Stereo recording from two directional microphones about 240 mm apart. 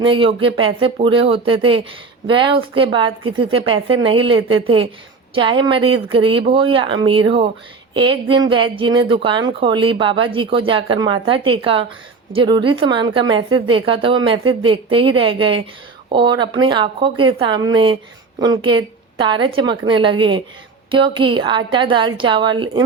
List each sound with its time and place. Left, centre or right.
0.0 s speech: right